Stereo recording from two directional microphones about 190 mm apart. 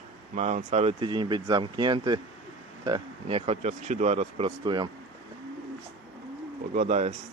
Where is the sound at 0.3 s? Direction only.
35° right (ahead or behind).